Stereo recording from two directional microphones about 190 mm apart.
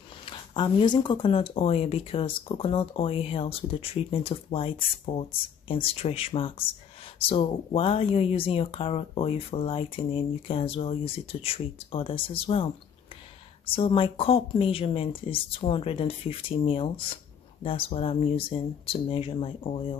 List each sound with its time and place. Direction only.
0.2 s speech: 25° left (ahead or behind)